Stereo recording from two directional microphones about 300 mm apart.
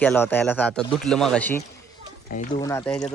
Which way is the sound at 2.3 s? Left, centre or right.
Left.